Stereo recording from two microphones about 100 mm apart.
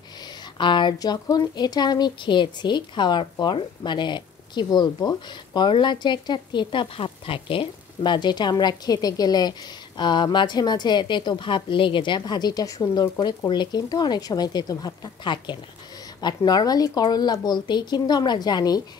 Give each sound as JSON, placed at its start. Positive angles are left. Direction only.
{"t": 0.6, "sound": "speech", "side_deg": 55}
{"t": 0.9, "sound": "speech", "side_deg": 40}